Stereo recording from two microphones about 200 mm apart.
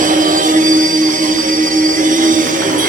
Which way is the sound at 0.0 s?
40° right (ahead or behind).